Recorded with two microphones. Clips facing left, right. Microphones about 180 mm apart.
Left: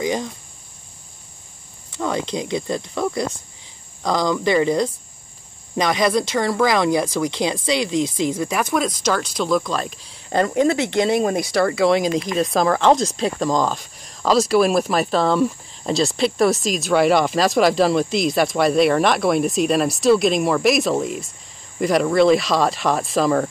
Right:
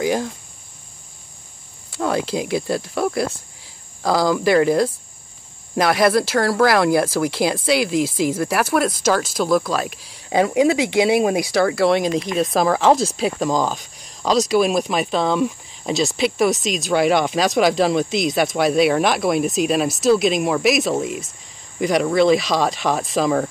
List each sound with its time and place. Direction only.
0.0 s speech: 5° right (ahead or behind)
2.0 s speech: 5° right (ahead or behind)